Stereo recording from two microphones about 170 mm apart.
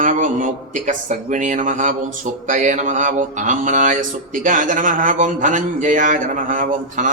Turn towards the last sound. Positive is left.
turn(degrees=-50)  # may be behind; listen again after turning